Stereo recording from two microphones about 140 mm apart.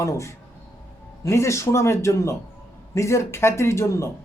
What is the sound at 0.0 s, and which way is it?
Speech, 20° left (ahead or behind).